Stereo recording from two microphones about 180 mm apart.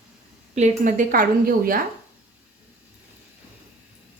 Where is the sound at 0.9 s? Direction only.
50° right (ahead or behind).